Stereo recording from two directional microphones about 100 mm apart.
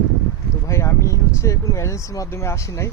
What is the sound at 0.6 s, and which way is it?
Speech, 30° left (ahead or behind).